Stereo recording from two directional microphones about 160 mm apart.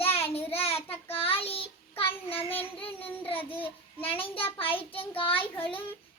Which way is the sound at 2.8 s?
35° left (ahead or behind).